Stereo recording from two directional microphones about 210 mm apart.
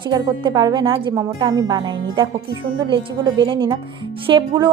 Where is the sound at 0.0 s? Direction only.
20° right (ahead or behind).